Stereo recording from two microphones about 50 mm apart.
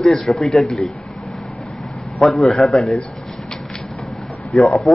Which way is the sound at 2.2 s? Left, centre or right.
Centre.